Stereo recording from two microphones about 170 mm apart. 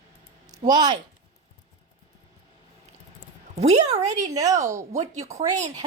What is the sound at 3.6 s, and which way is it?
Speech, 40° right (ahead or behind).